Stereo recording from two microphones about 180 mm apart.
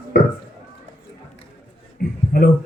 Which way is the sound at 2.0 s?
55° left (ahead or behind).